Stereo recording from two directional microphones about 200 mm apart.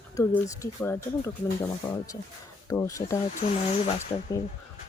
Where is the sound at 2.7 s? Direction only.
15° left (ahead or behind).